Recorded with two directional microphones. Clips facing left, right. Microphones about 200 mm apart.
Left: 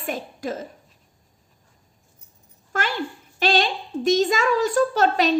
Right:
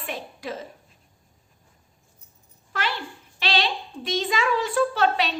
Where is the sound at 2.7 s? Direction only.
45° left (ahead or behind).